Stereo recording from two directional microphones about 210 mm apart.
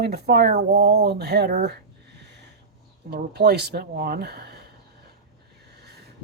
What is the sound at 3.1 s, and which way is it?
Speech, 50° right (ahead or behind).